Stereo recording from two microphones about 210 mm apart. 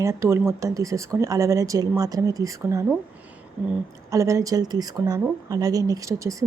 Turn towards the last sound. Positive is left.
turn(degrees=-15)  # may be behind; listen again after turning